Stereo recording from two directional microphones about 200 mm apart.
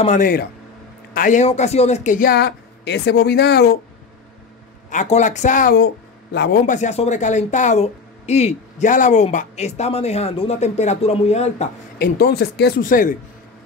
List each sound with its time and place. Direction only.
0.0 s speech: 40° left (ahead or behind); by 3.8 s 55° left (ahead or behind)
4.8 s speech: 35° left (ahead or behind)
6.3 s a man's voice: 55° left (ahead or behind)
6.6 s speech: 35° left (ahead or behind)
12.0 s speech: 50° left (ahead or behind)